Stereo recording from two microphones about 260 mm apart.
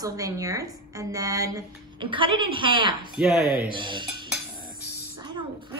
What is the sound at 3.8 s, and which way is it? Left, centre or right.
Speech, centre.